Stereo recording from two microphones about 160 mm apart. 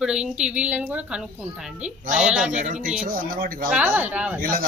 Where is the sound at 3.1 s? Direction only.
65° right (ahead or behind).